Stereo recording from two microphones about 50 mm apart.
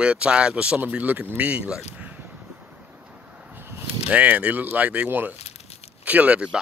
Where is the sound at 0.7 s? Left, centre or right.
Right.